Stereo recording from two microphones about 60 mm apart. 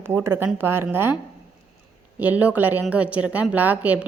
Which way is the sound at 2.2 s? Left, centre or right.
Right.